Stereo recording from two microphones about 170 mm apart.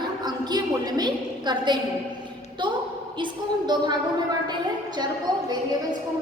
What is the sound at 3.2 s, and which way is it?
Speech, 25° right (ahead or behind).